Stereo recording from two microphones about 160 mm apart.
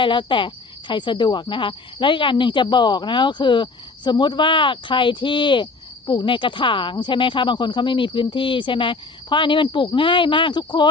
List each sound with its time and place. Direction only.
0.0 s cricket: 30° left (ahead or behind)